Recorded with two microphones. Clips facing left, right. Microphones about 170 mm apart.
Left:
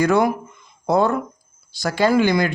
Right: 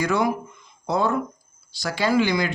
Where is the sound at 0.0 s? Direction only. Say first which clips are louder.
Left 5 dB; 50° left (ahead or behind).